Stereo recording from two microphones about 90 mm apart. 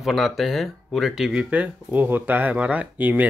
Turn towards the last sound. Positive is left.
turn(degrees=-20)  # may be behind; listen again after turning